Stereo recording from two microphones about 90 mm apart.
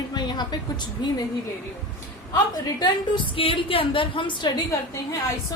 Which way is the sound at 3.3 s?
90° left.